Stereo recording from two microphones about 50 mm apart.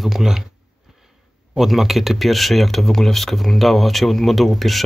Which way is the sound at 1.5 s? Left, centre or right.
Centre.